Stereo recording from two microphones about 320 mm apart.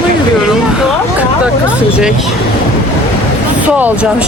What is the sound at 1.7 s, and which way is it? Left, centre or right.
Speech, centre.